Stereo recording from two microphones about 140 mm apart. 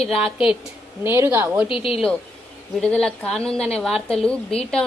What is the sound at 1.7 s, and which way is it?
Speech, 40° left (ahead or behind).